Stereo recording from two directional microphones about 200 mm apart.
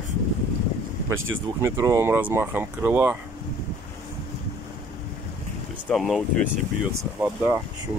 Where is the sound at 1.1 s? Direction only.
85° right.